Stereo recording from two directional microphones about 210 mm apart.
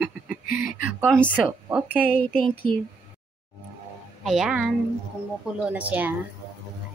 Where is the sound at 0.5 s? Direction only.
40° left (ahead or behind).